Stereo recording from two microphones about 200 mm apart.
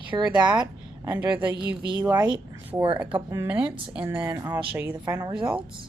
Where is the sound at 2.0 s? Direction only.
20° right (ahead or behind).